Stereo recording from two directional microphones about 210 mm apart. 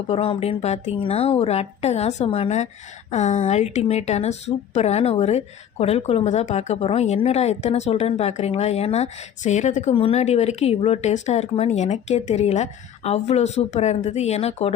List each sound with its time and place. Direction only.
0.1 s a woman's voice: 25° left (ahead or behind)